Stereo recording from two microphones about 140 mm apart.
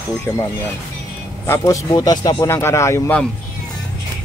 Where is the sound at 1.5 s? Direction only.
20° left (ahead or behind).